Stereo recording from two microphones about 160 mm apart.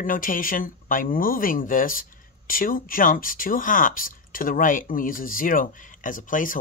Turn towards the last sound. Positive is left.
turn(degrees=55)  # may be behind; listen again after turning